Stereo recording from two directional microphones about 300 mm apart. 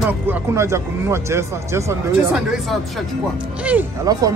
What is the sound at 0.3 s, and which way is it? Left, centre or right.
Speech, centre.